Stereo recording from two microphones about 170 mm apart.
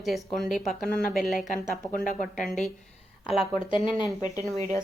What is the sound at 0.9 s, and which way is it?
Speech, 60° left (ahead or behind).